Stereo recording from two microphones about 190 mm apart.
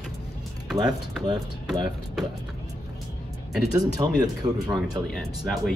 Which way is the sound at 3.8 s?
20° right (ahead or behind).